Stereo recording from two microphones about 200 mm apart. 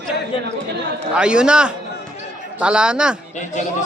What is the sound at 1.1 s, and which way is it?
Speech, 5° right (ahead or behind).